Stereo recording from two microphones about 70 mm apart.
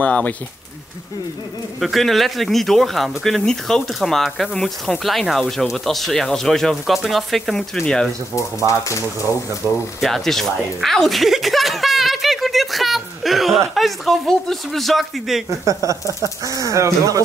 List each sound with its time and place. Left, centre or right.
0.0 s speech: left
1.8 s speech: centre
8.4 s speech: left
9.9 s a sound: centre
13.7 s speech: centre
15.6 s speech: right